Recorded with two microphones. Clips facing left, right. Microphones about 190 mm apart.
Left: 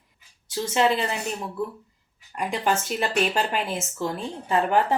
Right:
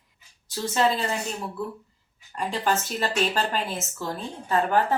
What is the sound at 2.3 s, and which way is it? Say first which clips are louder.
Speech: left 1 dB; 15° left (ahead or behind).